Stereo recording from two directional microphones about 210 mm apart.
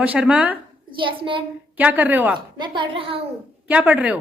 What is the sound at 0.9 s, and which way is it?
Speech, 25° right (ahead or behind).